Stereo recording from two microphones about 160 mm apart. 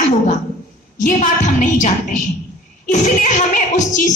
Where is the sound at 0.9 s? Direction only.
50° left (ahead or behind).